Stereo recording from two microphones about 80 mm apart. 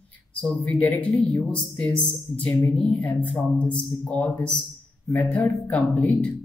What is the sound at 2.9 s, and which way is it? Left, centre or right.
Speech, centre.